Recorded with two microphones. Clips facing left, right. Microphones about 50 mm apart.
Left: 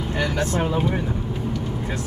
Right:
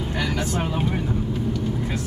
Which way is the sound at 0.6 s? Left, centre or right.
Centre.